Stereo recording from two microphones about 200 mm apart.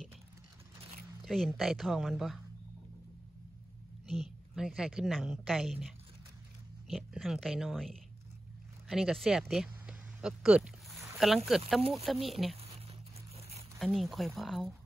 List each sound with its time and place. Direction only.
1.2 s a woman's voice: centre (ahead or behind)
4.1 s a woman's voice: centre (ahead or behind)
6.9 s a woman's voice: centre (ahead or behind)
13.7 s a woman's voice: centre (ahead or behind)